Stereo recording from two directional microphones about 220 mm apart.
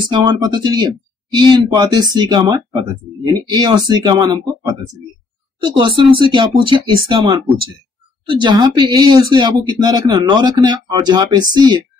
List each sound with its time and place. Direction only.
0.1 s speech: 20° right (ahead or behind)
5.6 s speech: 20° right (ahead or behind)